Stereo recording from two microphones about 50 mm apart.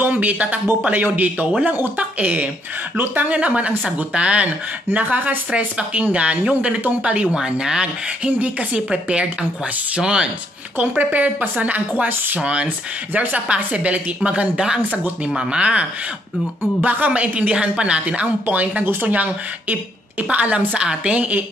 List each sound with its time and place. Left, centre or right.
0.0 s a man's voice: right
4.9 s a woman's voice: right
7.3 s speech: centre
10.8 s a woman's voice: right